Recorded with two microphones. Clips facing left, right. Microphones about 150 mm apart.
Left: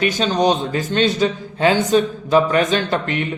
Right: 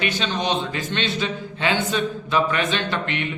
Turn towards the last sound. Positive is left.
turn(degrees=40)  # may be behind; listen again after turning